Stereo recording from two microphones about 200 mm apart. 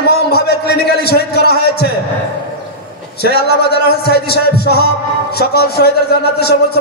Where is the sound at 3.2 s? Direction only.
55° left (ahead or behind).